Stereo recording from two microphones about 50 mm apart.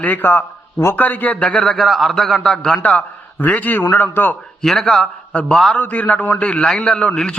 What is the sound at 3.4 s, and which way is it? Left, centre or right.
Speech, left.